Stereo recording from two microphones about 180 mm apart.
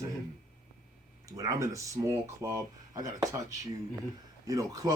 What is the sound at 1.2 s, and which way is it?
Speech, 20° right (ahead or behind).